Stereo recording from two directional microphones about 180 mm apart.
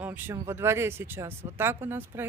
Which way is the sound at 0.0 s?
10° right (ahead or behind).